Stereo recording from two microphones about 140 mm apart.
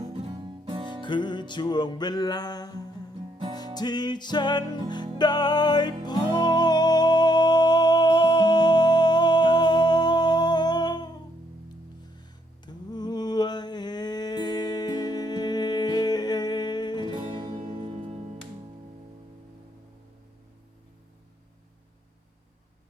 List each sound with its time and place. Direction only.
0.0 s music: 40° right (ahead or behind)
1.0 s music: 35° left (ahead or behind)
12.6 s a sound: 30° left (ahead or behind)
17.1 s music: 30° right (ahead or behind)